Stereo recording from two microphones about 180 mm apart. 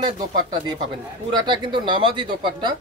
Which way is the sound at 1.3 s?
25° right (ahead or behind).